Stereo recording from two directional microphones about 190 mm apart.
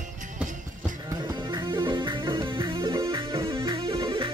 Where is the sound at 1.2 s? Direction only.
25° right (ahead or behind).